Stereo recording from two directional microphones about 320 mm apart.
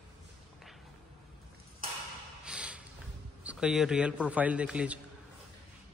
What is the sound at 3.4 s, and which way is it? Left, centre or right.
A man's voice, centre.